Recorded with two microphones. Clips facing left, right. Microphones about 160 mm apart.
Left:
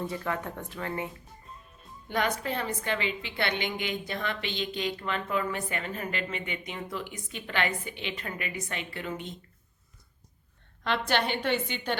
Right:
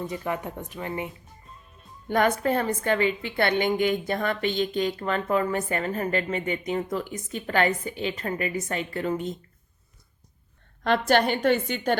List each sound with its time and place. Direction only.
0.1 s speech: 20° right (ahead or behind)
2.0 s a woman's voice: 50° right (ahead or behind)
10.8 s a woman's voice: 45° right (ahead or behind)